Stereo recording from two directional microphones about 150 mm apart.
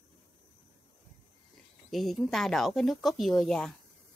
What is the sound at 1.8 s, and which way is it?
Speech, centre (ahead or behind).